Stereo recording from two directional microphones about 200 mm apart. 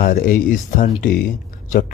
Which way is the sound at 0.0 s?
45° left (ahead or behind).